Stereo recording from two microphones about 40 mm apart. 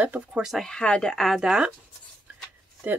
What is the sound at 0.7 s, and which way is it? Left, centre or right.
Speech, centre.